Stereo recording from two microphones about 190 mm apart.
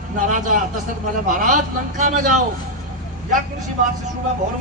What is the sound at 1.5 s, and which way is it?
Speech, 45° right (ahead or behind).